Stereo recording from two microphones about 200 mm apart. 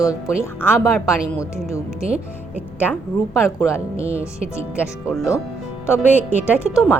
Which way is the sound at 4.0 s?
5° right (ahead or behind).